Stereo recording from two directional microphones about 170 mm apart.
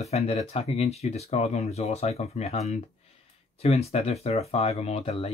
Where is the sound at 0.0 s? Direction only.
40° left (ahead or behind).